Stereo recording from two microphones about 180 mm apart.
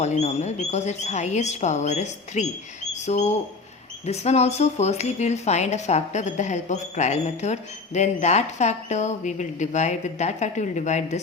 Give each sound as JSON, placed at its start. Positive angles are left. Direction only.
{"t": 0.0, "sound": "speech", "side_deg": 40}